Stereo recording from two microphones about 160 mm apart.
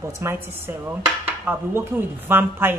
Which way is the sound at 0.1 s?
15° right (ahead or behind).